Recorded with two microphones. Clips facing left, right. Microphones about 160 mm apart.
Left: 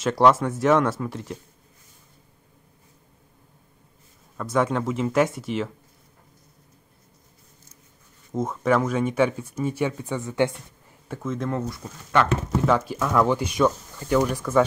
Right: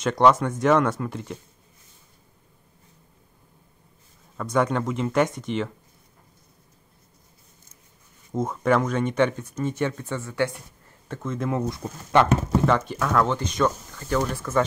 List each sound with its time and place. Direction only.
0.0 s speech: centre (ahead or behind)
4.4 s speech: centre (ahead or behind)
8.3 s speech: centre (ahead or behind); by 11.0 s 20° left (ahead or behind)
11.1 s speech: 5° left (ahead or behind)
11.6 s speech: 20° right (ahead or behind)
12.6 s speech: 5° left (ahead or behind)